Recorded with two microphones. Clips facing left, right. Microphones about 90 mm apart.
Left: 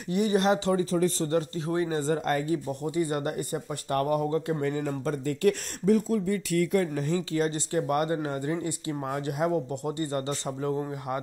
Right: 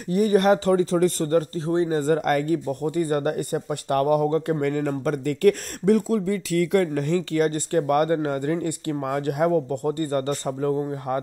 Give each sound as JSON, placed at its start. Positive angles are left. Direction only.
{"t": 0.1, "sound": "speech", "side_deg": -45}
{"t": 1.3, "sound": "speech", "side_deg": -45}
{"t": 1.7, "sound": "speech", "side_deg": -30}
{"t": 2.0, "sound": "speech", "side_deg": -55}
{"t": 3.9, "sound": "speech", "side_deg": -70}
{"t": 5.9, "sound": "speech", "side_deg": -75}
{"t": 7.3, "sound": "speech", "side_deg": -55}